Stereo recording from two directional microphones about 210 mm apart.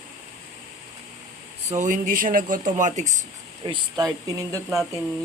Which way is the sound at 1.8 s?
40° right (ahead or behind).